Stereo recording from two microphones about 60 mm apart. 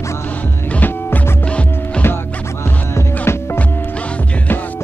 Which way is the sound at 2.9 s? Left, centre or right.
Left.